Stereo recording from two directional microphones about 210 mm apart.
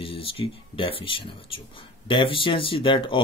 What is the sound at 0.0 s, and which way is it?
Speech, 25° left (ahead or behind).